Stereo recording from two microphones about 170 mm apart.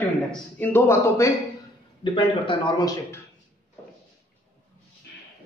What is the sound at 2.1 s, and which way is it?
Speech, 30° left (ahead or behind).